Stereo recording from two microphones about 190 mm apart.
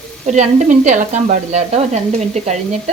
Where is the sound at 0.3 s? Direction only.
40° right (ahead or behind).